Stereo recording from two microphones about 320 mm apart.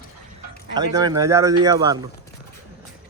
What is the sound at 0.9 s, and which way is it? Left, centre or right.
Speech, centre.